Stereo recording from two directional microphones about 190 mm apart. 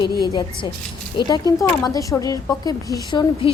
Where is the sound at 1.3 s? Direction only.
20° left (ahead or behind).